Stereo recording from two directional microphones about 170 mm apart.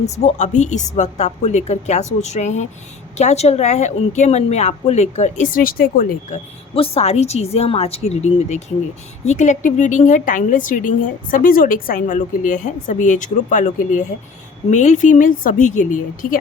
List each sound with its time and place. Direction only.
0.1 s a woman's voice: 40° left (ahead or behind)
6.7 s a woman's voice: 35° left (ahead or behind)